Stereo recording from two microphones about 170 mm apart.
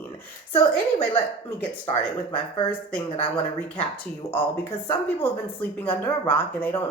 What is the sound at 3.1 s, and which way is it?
Speech, 35° left (ahead or behind).